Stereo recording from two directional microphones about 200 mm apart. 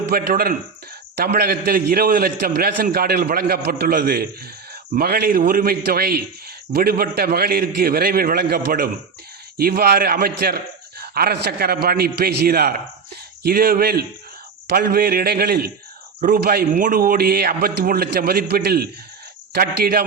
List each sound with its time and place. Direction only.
0.1 s a man's voice: 50° right (ahead or behind)